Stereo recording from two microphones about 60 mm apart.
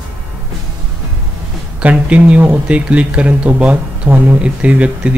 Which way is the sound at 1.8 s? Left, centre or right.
Right.